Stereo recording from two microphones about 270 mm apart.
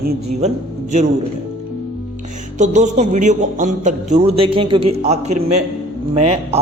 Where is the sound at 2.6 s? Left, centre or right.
Right.